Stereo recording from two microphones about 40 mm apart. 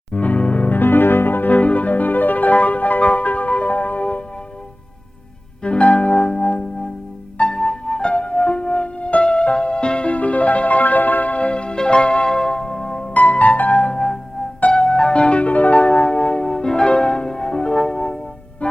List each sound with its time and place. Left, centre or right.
0.1 s music: left
0.8 s music: left
1.5 s music: left
5.6 s music: left
13.1 s music: left
18.6 s music: left